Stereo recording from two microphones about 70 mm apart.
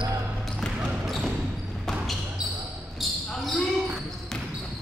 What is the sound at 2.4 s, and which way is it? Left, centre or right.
Basketball bounce, left.